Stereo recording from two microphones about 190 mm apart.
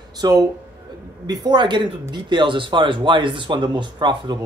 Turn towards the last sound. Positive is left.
turn(degrees=-25)  # may be behind; listen again after turning